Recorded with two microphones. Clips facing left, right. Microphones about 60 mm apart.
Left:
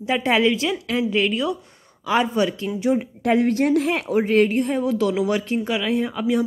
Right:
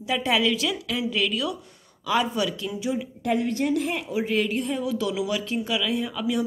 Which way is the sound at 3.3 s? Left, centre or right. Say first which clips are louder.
Left 6 dB; left.